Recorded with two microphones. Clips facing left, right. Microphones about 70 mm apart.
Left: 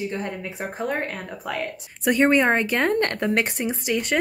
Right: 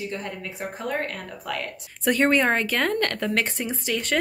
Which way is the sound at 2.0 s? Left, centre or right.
Centre.